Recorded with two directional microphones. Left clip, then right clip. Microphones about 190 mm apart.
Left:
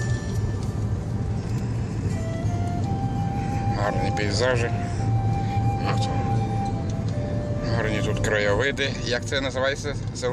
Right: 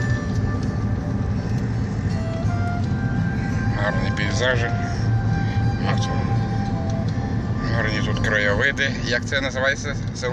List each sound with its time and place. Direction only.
3.8 s music: 25° left (ahead or behind)
7.8 s speech: 25° left (ahead or behind)